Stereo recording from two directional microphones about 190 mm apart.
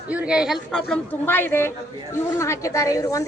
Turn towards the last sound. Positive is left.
turn(degrees=15)  # may be behind; listen again after turning